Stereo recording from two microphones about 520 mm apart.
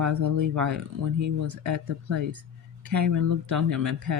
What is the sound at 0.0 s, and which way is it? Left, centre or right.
Speech, right.